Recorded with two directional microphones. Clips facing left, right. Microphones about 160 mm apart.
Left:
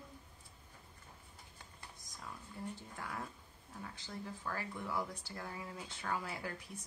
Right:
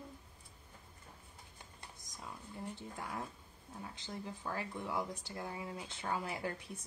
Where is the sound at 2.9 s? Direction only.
20° right (ahead or behind).